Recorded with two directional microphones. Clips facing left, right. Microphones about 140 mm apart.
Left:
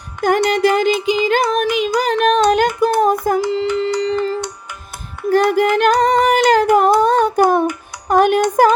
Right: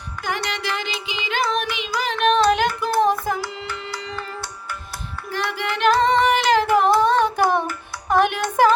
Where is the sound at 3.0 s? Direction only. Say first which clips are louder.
Left 1 dB; 45° left (ahead or behind).